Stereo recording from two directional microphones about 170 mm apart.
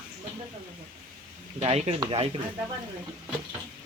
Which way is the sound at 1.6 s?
35° right (ahead or behind).